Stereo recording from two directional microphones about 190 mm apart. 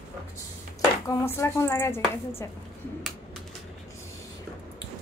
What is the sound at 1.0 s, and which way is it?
Speech, 15° left (ahead or behind).